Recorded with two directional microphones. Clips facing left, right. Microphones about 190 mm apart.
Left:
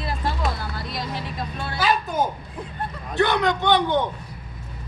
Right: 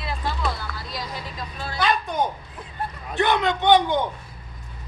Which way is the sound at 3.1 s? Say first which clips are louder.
Left 1 dB; 20° right (ahead or behind).